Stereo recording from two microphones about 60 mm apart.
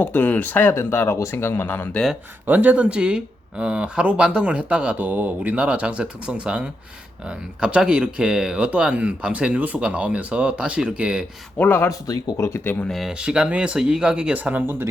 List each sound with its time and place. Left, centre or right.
0.0 s speech: left
2.5 s speech: right
11.9 s speech: left
12.7 s speech: left
13.1 s speech: centre; by 14.8 s right